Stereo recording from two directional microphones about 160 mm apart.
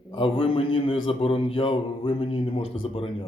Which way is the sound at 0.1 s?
35° left (ahead or behind).